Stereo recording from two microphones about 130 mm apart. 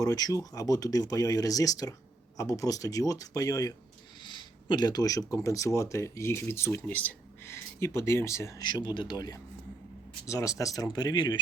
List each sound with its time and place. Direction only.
0.0 s speech: 30° left (ahead or behind)
8.6 s a man's voice: 35° left (ahead or behind)